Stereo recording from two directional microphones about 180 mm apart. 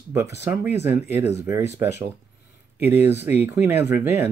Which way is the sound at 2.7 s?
10° right (ahead or behind).